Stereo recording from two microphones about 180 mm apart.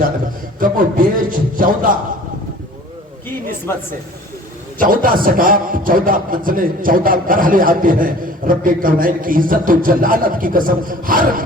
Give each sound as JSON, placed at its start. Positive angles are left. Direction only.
{"t": 0.6, "sound": "a man's voice", "side_deg": -50}
{"t": 3.7, "sound": "speech", "side_deg": 15}
{"t": 4.8, "sound": "a man's voice", "side_deg": -50}